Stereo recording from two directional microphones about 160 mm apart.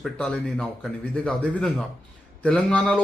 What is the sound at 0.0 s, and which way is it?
Speech, 5° left (ahead or behind).